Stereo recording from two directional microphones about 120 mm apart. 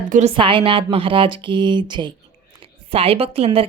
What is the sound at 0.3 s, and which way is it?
Speech, 45° right (ahead or behind).